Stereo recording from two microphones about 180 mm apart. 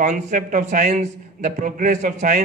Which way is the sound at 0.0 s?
45° right (ahead or behind).